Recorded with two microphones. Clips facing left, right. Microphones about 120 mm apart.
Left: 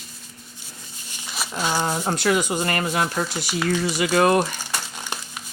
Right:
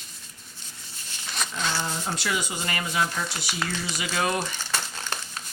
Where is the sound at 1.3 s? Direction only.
10° left (ahead or behind).